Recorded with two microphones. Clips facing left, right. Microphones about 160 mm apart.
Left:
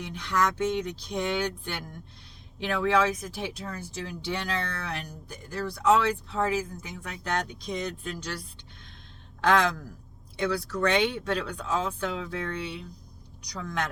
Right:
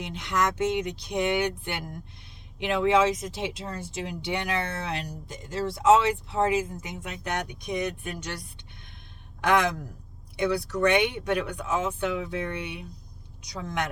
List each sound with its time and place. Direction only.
0.1 s speech: 20° right (ahead or behind)